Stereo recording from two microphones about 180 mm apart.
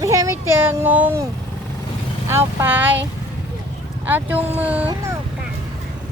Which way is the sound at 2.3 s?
15° right (ahead or behind).